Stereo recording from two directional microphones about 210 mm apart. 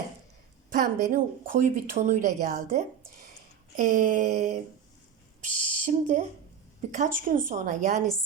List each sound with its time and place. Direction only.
0.7 s speech: 40° right (ahead or behind)
5.7 s speech: 35° right (ahead or behind)